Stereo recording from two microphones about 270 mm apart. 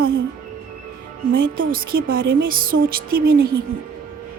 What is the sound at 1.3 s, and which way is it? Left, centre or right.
Speech, right.